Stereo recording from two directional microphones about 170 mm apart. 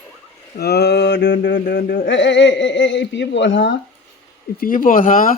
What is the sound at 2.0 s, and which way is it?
Speech, 90° left.